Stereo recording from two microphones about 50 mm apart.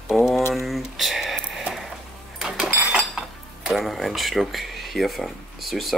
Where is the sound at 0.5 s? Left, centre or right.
Centre.